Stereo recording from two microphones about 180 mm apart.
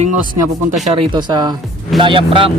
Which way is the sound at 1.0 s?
25° right (ahead or behind).